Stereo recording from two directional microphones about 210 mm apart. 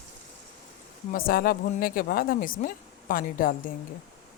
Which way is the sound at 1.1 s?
45° left (ahead or behind).